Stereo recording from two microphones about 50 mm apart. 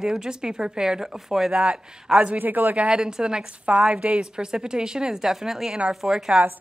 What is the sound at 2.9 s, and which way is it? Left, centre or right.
A woman's voice, centre.